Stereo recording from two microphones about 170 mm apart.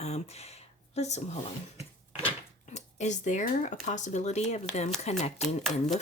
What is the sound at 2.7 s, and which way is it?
Speech, 45° left (ahead or behind).